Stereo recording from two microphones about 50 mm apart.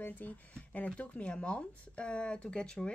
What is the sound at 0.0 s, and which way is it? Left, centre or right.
Speech, left.